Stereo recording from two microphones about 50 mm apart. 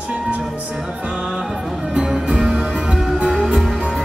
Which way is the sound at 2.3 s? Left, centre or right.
Centre.